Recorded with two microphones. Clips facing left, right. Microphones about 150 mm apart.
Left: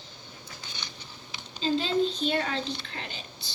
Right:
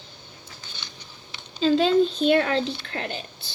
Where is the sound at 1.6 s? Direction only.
70° right (ahead or behind).